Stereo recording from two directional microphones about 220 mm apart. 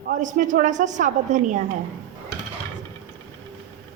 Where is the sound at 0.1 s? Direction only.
35° right (ahead or behind).